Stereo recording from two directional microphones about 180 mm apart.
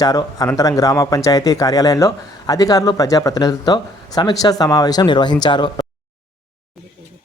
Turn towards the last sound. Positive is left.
turn(degrees=25)  # may be behind; listen again after turning